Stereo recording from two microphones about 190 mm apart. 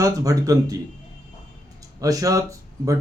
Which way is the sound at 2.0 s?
20° right (ahead or behind).